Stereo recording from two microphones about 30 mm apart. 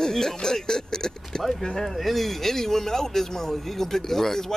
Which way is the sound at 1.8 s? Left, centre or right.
Centre.